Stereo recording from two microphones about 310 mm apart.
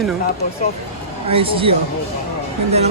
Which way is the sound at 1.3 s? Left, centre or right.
Centre.